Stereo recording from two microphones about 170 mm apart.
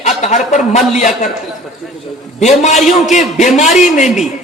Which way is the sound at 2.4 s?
40° left (ahead or behind).